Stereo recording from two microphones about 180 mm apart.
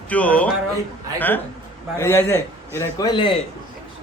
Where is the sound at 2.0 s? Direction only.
15° left (ahead or behind).